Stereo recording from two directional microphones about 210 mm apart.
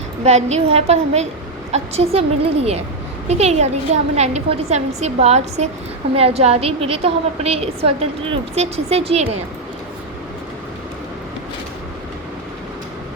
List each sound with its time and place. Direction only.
0.3 s a woman's voice: 30° right (ahead or behind)